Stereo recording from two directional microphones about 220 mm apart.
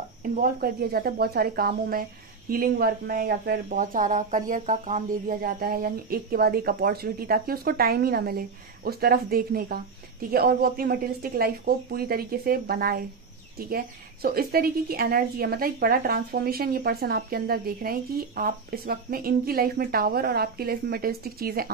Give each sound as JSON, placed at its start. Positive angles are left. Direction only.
{"t": 0.2, "sound": "a woman's voice", "side_deg": -40}